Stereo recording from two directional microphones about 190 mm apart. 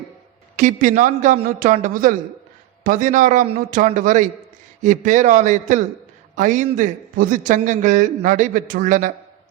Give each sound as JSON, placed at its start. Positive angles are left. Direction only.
{"t": 0.5, "sound": "a man's voice", "side_deg": -40}